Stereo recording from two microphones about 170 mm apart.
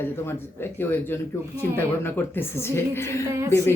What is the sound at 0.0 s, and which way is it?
A man's voice, 15° left (ahead or behind).